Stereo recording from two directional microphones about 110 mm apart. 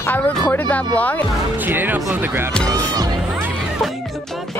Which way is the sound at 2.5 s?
15° left (ahead or behind).